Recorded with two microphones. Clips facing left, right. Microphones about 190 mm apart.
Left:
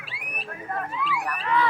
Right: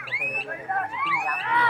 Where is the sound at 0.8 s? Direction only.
60° right (ahead or behind).